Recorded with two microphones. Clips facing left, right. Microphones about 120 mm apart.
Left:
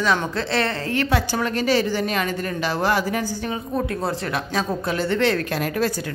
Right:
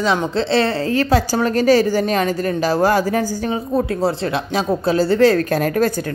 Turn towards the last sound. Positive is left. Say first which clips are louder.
# right 6 dB
turn(degrees=-45)  # may be behind; listen again after turning